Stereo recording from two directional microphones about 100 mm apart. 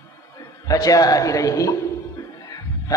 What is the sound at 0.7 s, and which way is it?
A man's voice, 35° left (ahead or behind).